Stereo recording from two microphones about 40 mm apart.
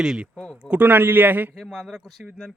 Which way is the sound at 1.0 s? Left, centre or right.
Right.